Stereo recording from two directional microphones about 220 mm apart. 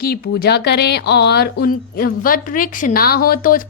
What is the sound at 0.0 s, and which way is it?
Speech, 45° left (ahead or behind).